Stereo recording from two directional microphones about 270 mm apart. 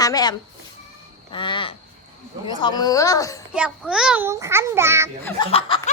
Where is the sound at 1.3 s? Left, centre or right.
Centre.